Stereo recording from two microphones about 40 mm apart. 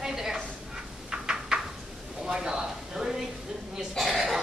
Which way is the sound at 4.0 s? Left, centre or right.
Centre.